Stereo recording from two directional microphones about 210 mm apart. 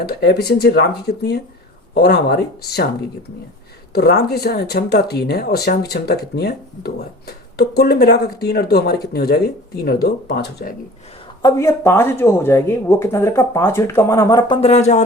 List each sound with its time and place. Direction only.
0.0 s speech: 50° left (ahead or behind)
3.9 s speech: 50° left (ahead or behind)
11.4 s speech: 15° left (ahead or behind); by 15.0 s 35° left (ahead or behind)